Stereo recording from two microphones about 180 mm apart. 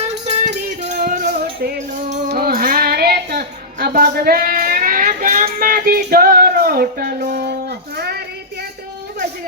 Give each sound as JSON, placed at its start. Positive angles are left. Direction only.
{"t": 0.7, "sound": "music", "side_deg": -45}
{"t": 2.0, "sound": "music", "side_deg": -40}
{"t": 2.3, "sound": "a sound", "side_deg": -55}